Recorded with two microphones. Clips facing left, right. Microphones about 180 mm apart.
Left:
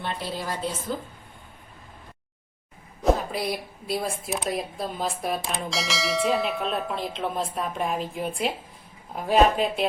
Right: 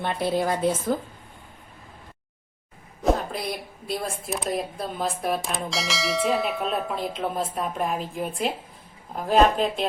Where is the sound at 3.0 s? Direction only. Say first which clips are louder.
Left 1 dB; centre (ahead or behind).